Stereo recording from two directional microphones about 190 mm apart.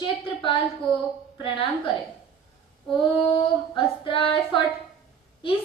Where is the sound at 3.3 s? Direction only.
25° left (ahead or behind).